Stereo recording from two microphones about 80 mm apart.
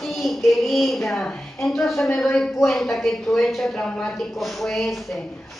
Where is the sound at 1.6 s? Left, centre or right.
Centre.